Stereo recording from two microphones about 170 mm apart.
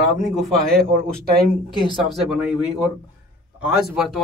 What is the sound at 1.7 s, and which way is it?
Speech, 30° right (ahead or behind).